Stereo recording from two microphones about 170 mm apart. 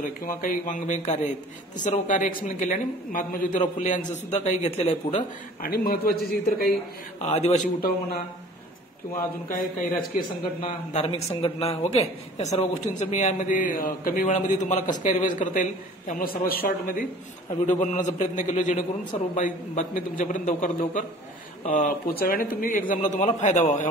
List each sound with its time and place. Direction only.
0.0 s a man's voice: 50° left (ahead or behind)
5.6 s a man's voice: 60° left (ahead or behind)
7.2 s a man's voice: 40° left (ahead or behind)
9.1 s a man's voice: 55° left (ahead or behind)
10.6 s a man's voice: 35° left (ahead or behind); by 17.0 s 60° left (ahead or behind)
17.5 s a man's voice: 45° left (ahead or behind)